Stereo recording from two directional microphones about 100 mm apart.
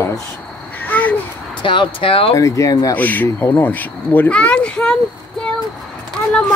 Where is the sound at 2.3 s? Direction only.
35° left (ahead or behind).